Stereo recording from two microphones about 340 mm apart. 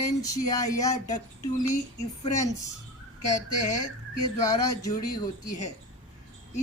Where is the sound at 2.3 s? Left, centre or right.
Centre.